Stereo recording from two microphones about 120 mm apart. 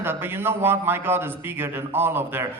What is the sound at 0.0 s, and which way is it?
A man's voice, 20° right (ahead or behind).